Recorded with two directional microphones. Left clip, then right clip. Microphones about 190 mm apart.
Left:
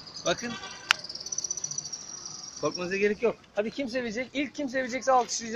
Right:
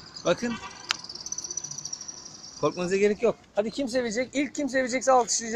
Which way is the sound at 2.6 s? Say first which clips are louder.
Right 4 dB; 30° right (ahead or behind).